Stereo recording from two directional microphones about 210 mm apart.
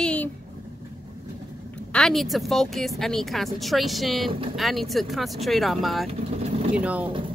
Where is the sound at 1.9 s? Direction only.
Centre (ahead or behind).